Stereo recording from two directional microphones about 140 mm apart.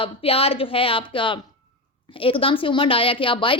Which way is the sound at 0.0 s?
45° left (ahead or behind).